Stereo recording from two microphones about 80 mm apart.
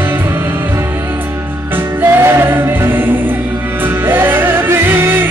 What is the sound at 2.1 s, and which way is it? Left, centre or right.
Music, right.